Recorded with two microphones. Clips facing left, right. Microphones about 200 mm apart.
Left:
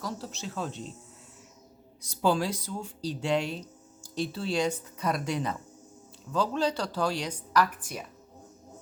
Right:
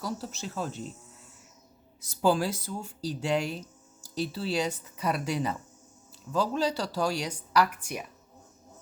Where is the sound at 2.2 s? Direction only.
5° right (ahead or behind).